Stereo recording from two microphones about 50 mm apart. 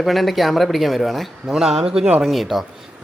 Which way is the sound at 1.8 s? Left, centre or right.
Centre.